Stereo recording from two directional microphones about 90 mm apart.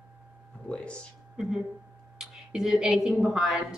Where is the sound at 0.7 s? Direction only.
10° left (ahead or behind).